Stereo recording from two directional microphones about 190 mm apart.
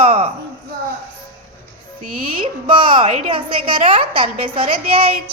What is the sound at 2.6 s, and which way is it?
A woman's voice, 25° right (ahead or behind).